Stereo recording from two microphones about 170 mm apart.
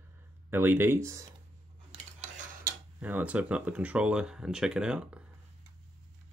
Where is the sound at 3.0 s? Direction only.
10° right (ahead or behind).